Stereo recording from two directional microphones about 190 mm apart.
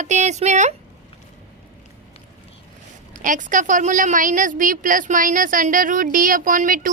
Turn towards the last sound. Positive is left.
turn(degrees=-45)  # may be behind; listen again after turning